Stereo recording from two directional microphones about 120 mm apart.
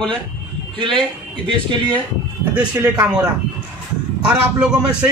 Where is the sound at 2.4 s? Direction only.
10° right (ahead or behind).